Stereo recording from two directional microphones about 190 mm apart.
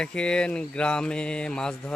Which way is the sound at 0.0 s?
5° left (ahead or behind).